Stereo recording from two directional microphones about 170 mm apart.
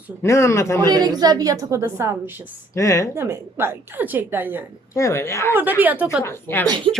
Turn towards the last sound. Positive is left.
turn(degrees=15)  # may be behind; listen again after turning